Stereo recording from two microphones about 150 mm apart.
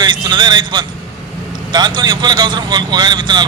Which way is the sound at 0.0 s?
30° right (ahead or behind).